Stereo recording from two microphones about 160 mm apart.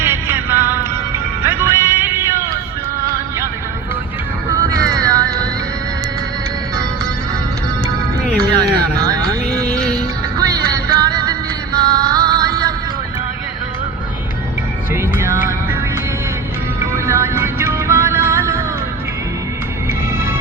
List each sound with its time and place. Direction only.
0.0 s music: 15° right (ahead or behind)
4.7 s music: 25° right (ahead or behind)
8.4 s a sound: 25° right (ahead or behind)
9.6 s music: 10° left (ahead or behind)
10.3 s music: 25° right (ahead or behind)
17.1 s music: 20° right (ahead or behind)